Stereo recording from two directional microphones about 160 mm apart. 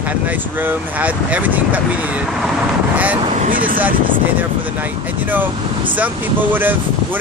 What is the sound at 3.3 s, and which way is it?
Speech, 55° right (ahead or behind).